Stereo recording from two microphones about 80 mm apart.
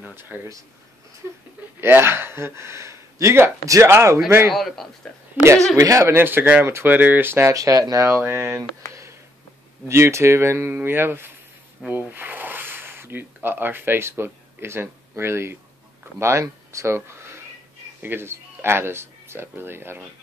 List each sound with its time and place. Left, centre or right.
0.0 s speech: right
1.8 s speech: right
4.5 s a man's voice: centre
5.8 s speech: right
6.1 s speech: right
7.5 s speech: right
8.2 s speech: right
9.8 s speech: right